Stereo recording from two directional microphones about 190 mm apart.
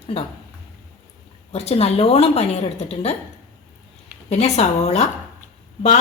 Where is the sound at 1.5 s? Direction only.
35° left (ahead or behind).